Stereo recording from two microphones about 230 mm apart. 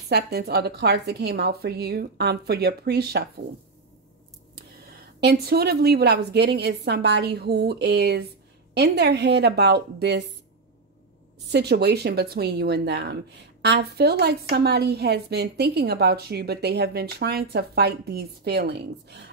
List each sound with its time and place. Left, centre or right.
0.1 s a woman's voice: right
5.2 s a woman's voice: right
11.5 s a woman's voice: right